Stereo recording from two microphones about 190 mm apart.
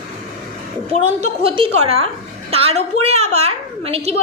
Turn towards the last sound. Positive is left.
turn(degrees=-30)  # may be behind; listen again after turning